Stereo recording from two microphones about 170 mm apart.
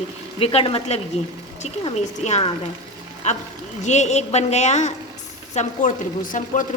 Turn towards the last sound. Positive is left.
turn(degrees=50)  # may be behind; listen again after turning